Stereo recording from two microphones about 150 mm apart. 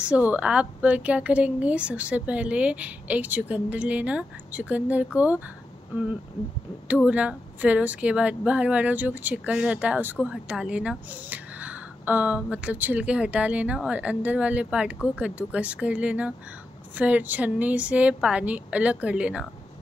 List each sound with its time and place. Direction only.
0.0 s a woman's voice: 10° right (ahead or behind)
7.1 s a woman's voice: 10° right (ahead or behind)